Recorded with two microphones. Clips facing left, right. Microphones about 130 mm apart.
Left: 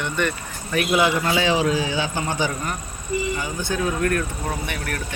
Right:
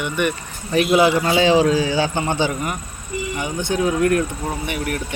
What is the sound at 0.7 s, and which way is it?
A man's voice, 30° right (ahead or behind).